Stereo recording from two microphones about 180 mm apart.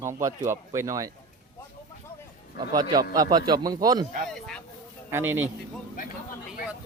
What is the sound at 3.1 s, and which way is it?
Speech, 20° right (ahead or behind).